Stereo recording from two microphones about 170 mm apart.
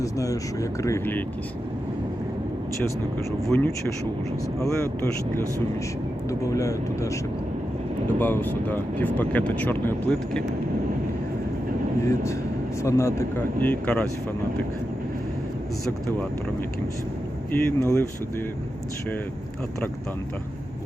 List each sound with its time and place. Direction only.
0.0 s speech: 20° left (ahead or behind)
3.5 s speech: 5° left (ahead or behind)
6.5 s speech: 20° left (ahead or behind)
8.2 s speech: 10° left (ahead or behind)
12.0 s speech: 15° left (ahead or behind)
17.5 s speech: 15° left (ahead or behind)